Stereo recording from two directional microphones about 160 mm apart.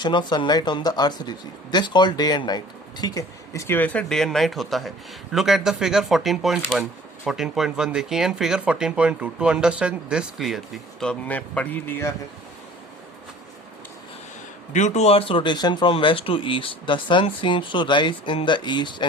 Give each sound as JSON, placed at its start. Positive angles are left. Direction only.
{"t": 0.0, "sound": "speech", "side_deg": 30}
{"t": 14.7, "sound": "speech", "side_deg": 45}